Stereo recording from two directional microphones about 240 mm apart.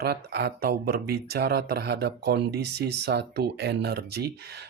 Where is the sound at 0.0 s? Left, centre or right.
Right.